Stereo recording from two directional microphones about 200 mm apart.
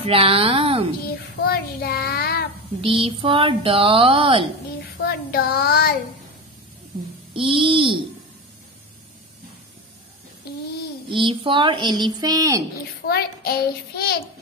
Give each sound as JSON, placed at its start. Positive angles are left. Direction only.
{"t": 0.0, "sound": "a woman's voice", "side_deg": -30}
{"t": 1.4, "sound": "child singing", "side_deg": 50}
{"t": 2.8, "sound": "speech", "side_deg": -25}
{"t": 4.9, "sound": "child singing", "side_deg": 50}
{"t": 7.3, "sound": "speech", "side_deg": -25}
{"t": 11.1, "sound": "speech", "side_deg": -25}
{"t": 13.0, "sound": "a child's voice", "side_deg": 50}